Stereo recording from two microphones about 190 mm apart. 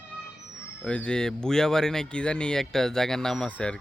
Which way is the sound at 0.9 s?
5° left (ahead or behind).